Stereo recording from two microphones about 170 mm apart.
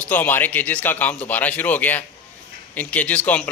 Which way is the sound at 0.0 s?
10° left (ahead or behind).